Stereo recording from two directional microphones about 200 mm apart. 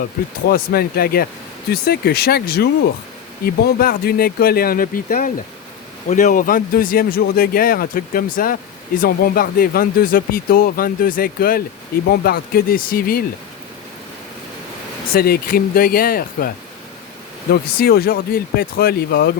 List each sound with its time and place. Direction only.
0.4 s speech: 50° left (ahead or behind)
15.1 s speech: 45° left (ahead or behind)
17.5 s speech: 50° left (ahead or behind)